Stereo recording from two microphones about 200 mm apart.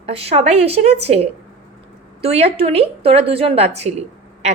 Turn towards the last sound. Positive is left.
turn(degrees=-35)  # may be behind; listen again after turning